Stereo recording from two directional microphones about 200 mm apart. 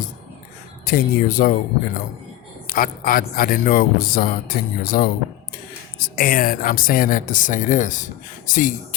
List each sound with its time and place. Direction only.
0.9 s speech: 45° left (ahead or behind)
2.6 s speech: 45° left (ahead or behind)